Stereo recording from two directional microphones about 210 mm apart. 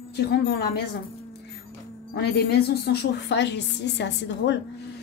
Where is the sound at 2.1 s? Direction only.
50° left (ahead or behind).